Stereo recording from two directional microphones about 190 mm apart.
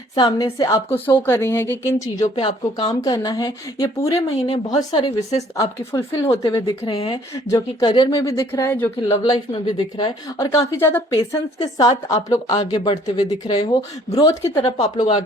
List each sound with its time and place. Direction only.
0.2 s speech: 30° left (ahead or behind)
0.6 s speech: 15° left (ahead or behind)
2.2 s speech: 30° left (ahead or behind)
4.4 s speech: 30° left (ahead or behind)
4.8 s speech: 20° left (ahead or behind)